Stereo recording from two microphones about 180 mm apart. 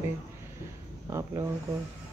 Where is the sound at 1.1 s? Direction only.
15° right (ahead or behind).